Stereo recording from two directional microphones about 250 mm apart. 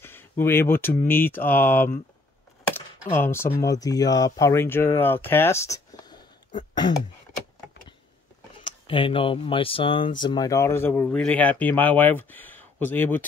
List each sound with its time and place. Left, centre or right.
0.0 s speech: centre
3.1 s speech: centre
8.6 s speech: centre